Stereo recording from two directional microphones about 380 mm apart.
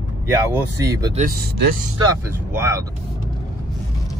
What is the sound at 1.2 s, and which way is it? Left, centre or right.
Speech, right.